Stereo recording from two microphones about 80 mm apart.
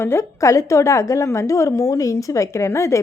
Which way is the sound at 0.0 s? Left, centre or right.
Left.